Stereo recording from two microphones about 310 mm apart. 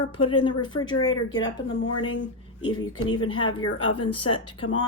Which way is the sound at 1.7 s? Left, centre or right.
Left.